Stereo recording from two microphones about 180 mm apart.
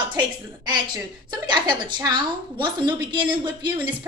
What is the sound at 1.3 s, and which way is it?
A woman's voice, 25° right (ahead or behind).